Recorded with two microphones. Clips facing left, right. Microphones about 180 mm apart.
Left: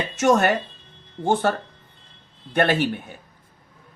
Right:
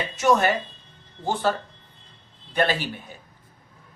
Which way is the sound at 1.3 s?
55° left (ahead or behind).